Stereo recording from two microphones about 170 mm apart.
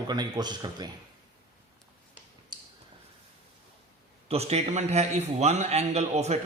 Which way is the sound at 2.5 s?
25° right (ahead or behind).